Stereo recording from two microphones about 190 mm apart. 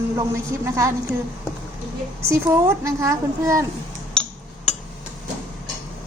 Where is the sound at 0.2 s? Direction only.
15° right (ahead or behind).